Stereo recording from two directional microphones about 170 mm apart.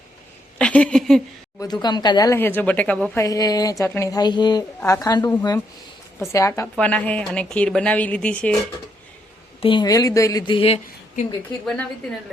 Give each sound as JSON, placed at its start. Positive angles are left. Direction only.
{"t": 0.6, "sound": "a sound", "side_deg": 5}
{"t": 1.5, "sound": "a woman's voice", "side_deg": 25}
{"t": 3.2, "sound": "speech", "side_deg": 20}
{"t": 6.7, "sound": "a woman's voice", "side_deg": 5}
{"t": 9.6, "sound": "speech", "side_deg": 30}